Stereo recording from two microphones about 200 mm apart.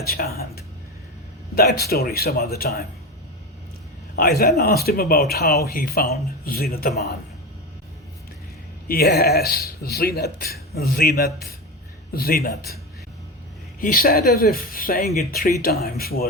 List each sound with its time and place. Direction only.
0.1 s speech: 50° left (ahead or behind)
1.5 s speech: 50° left (ahead or behind)
4.1 s speech: 50° left (ahead or behind)
8.9 s speech: 50° left (ahead or behind)